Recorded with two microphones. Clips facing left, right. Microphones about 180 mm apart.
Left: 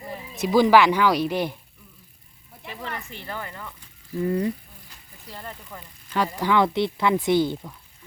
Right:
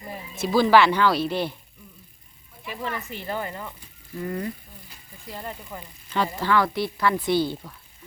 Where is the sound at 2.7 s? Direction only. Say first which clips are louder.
Right 3 dB; 15° right (ahead or behind).